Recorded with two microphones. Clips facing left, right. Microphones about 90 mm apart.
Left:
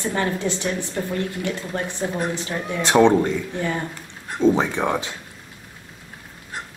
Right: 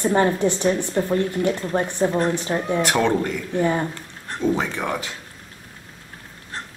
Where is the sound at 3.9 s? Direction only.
15° left (ahead or behind).